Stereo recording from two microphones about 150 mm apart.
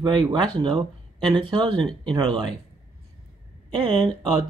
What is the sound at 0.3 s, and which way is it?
Speech, 30° right (ahead or behind).